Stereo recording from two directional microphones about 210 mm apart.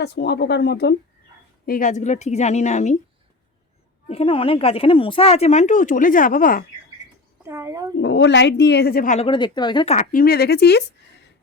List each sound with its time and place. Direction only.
0.0 s speech: 50° left (ahead or behind)
1.6 s a woman's voice: 40° left (ahead or behind)
4.1 s speech: 25° left (ahead or behind)
7.4 s speech: 15° right (ahead or behind)
8.0 s speech: 55° left (ahead or behind)